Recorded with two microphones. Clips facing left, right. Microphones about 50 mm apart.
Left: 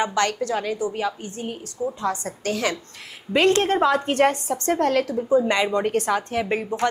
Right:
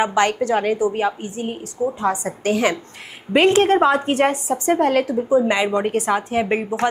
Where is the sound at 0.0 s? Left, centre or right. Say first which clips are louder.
Right 4 dB; centre.